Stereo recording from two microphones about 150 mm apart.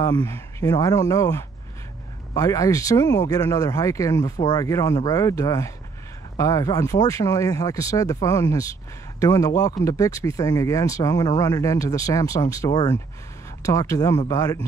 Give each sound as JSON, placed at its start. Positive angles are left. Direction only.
{"t": 0.0, "sound": "speech", "side_deg": 25}